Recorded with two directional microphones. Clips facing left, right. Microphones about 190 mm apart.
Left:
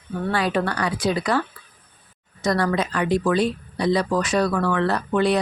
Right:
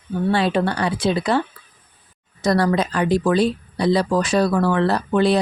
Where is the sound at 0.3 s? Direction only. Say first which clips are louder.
Right 3 dB; 25° right (ahead or behind).